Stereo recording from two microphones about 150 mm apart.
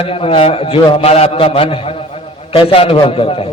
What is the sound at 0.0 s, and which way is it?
A man's voice, 40° left (ahead or behind).